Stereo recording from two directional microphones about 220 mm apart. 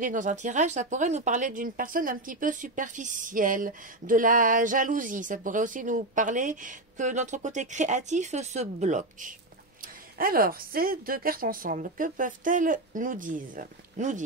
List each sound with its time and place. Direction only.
0.0 s speech: 35° right (ahead or behind)